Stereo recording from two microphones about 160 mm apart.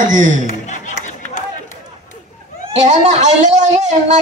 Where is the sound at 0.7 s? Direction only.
50° left (ahead or behind).